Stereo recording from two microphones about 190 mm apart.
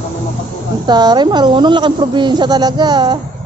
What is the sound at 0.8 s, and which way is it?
A woman's voice, 20° right (ahead or behind).